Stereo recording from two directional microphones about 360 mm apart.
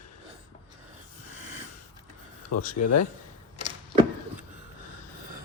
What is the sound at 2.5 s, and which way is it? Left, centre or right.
Speech, left.